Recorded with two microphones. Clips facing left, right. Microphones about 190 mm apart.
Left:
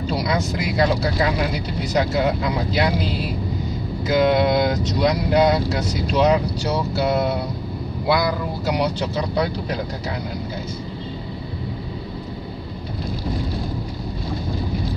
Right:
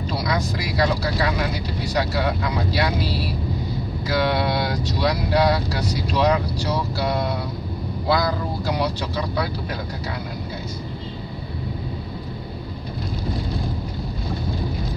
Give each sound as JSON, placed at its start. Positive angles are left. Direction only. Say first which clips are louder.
{"t": 0.2, "sound": "speech", "louder": "left 2 dB", "side_deg": 25}
{"t": 8.6, "sound": "speech", "louder": "left 4 dB", "side_deg": 20}